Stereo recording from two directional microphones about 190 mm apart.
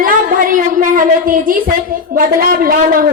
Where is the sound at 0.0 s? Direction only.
45° right (ahead or behind).